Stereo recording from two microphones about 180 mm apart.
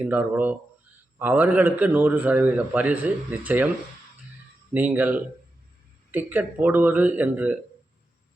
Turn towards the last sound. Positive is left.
turn(degrees=-10)  # may be behind; listen again after turning